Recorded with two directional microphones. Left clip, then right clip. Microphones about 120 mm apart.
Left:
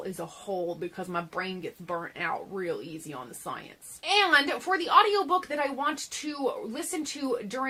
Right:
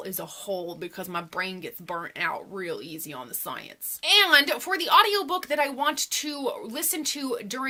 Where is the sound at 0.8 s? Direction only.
15° right (ahead or behind).